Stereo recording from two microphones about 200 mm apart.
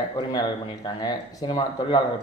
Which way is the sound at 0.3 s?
20° left (ahead or behind).